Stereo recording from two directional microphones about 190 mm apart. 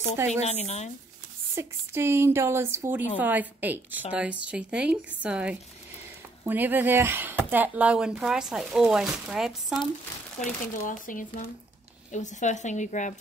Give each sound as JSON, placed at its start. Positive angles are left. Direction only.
{"t": 0.4, "sound": "a woman's voice", "side_deg": 35}
{"t": 1.5, "sound": "a woman's voice", "side_deg": -15}
{"t": 10.4, "sound": "a woman's voice", "side_deg": 45}